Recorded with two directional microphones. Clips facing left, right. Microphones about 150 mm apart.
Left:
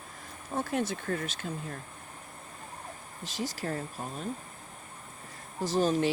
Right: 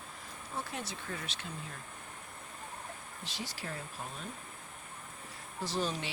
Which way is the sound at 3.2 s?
45° left (ahead or behind).